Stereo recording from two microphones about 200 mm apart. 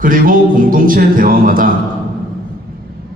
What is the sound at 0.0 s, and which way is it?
A man's voice, 45° right (ahead or behind).